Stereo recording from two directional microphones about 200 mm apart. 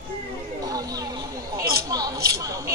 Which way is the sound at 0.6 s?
20° right (ahead or behind).